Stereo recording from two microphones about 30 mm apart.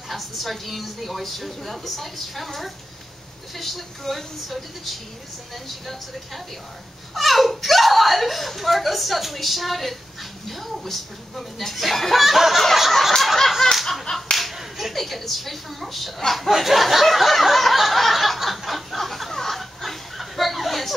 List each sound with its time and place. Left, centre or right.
0.1 s speech: centre
13.2 s snicker: centre
14.1 s a sound: left
14.5 s finger snapping: centre
14.9 s speech: centre
16.3 s snicker: centre
19.5 s chuckle: centre